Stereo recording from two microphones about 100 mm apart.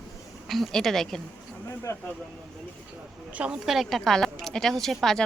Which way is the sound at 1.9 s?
30° left (ahead or behind).